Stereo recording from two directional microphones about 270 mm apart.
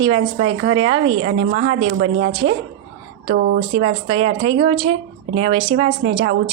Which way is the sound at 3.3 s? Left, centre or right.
Right.